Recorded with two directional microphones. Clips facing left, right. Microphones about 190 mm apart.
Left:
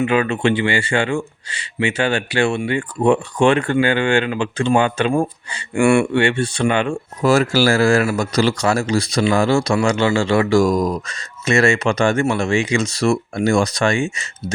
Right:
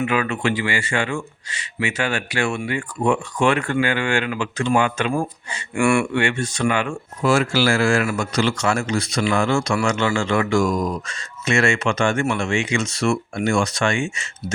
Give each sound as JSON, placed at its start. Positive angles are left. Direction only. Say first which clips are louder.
{"t": 0.0, "sound": "speech", "louder": "left 4 dB", "side_deg": 30}